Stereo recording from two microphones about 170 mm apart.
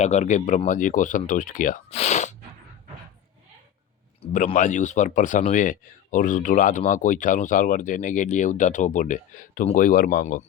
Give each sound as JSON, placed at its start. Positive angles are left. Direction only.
{"t": 0.0, "sound": "speech", "side_deg": 45}
{"t": 1.9, "sound": "speech", "side_deg": 40}
{"t": 4.2, "sound": "speech", "side_deg": 45}